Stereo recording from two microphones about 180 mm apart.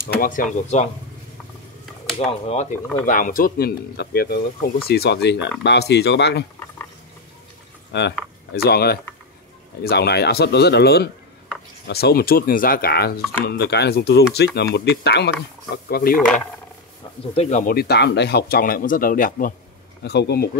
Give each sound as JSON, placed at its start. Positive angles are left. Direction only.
{"t": 0.2, "sound": "speech", "side_deg": 45}
{"t": 2.1, "sound": "speech", "side_deg": 35}
{"t": 3.1, "sound": "speech", "side_deg": 50}
{"t": 7.9, "sound": "speech", "side_deg": 70}
{"t": 15.7, "sound": "speech", "side_deg": 55}
{"t": 17.4, "sound": "speech", "side_deg": 40}
{"t": 20.0, "sound": "speech", "side_deg": 70}